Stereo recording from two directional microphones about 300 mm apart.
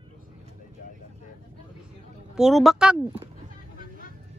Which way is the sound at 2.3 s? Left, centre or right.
Centre.